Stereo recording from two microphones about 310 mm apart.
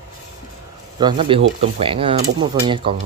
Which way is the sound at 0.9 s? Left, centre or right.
Centre.